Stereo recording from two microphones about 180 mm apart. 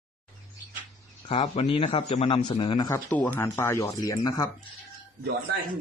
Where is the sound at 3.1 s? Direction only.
10° left (ahead or behind).